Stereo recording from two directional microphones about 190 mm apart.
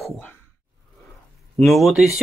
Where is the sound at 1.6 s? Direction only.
Centre (ahead or behind).